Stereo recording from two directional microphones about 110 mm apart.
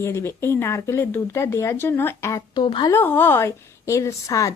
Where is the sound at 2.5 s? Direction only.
45° left (ahead or behind).